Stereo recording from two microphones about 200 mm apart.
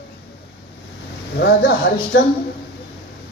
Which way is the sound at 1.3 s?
55° left (ahead or behind).